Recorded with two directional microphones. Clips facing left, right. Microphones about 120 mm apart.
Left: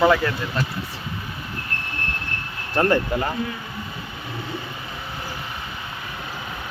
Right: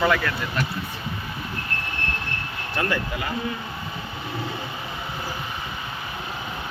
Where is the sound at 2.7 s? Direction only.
40° left (ahead or behind).